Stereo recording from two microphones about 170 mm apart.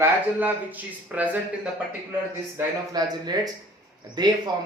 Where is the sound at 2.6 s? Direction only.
20° right (ahead or behind).